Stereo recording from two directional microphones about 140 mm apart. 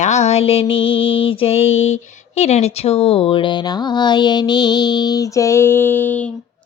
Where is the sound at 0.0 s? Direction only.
55° left (ahead or behind); by 6.3 s 10° left (ahead or behind).